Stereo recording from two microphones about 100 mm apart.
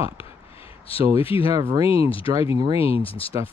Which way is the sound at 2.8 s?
70° left (ahead or behind).